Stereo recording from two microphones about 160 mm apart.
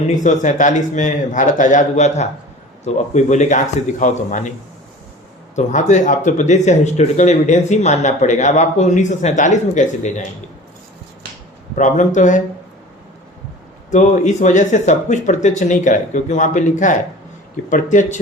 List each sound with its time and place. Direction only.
0.2 s speech: 50° left (ahead or behind)
5.5 s speech: 50° left (ahead or behind)
11.7 s speech: 50° left (ahead or behind)
13.9 s speech: 50° left (ahead or behind)